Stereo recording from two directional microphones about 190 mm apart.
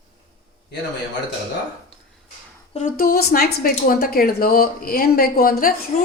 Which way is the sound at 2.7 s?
45° left (ahead or behind).